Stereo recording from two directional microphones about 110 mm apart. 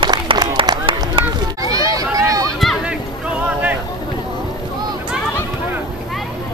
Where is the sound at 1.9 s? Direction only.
30° right (ahead or behind).